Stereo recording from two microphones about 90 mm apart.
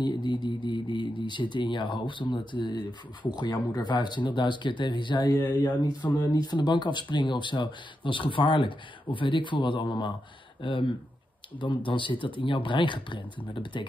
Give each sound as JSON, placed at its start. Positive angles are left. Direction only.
{"t": 0.0, "sound": "speech", "side_deg": 55}